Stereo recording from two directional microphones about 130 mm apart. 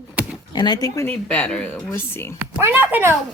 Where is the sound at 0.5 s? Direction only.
35° left (ahead or behind).